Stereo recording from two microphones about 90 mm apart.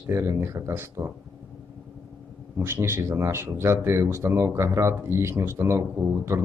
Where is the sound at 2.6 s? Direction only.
30° right (ahead or behind).